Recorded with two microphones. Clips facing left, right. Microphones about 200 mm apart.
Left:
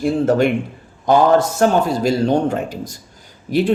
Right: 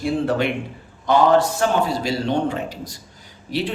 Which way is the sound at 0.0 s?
45° left (ahead or behind).